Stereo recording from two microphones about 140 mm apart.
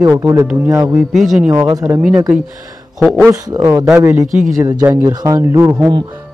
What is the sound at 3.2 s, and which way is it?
Speech, 25° right (ahead or behind).